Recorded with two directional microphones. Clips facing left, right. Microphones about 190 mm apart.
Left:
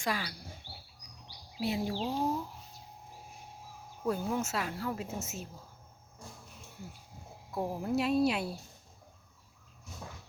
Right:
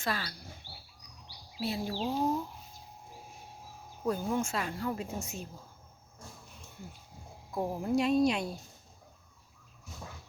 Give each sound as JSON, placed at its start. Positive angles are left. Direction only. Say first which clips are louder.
{"t": 0.0, "sound": "speech", "louder": "left 1 dB", "side_deg": 15}
{"t": 1.5, "sound": "speech", "louder": "left 2 dB", "side_deg": 15}
{"t": 1.9, "sound": "speech", "louder": "right 1 dB", "side_deg": -5}
{"t": 4.0, "sound": "speech", "louder": "right 1 dB", "side_deg": 5}
{"t": 7.5, "sound": "speech", "louder": "right 2 dB", "side_deg": 0}